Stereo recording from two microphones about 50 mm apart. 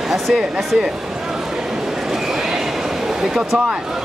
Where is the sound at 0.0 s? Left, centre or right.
Centre.